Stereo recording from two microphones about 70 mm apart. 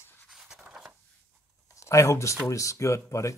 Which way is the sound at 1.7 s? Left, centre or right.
Left.